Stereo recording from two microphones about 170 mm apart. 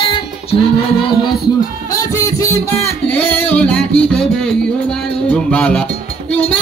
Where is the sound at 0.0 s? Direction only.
30° left (ahead or behind).